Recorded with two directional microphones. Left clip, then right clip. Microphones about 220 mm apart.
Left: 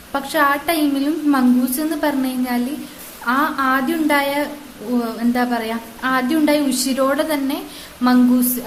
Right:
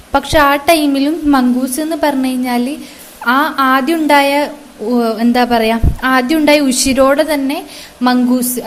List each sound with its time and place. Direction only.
0.1 s a woman's voice: 30° right (ahead or behind)